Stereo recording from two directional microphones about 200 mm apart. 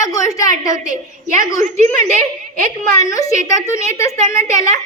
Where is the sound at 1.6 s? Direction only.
40° right (ahead or behind).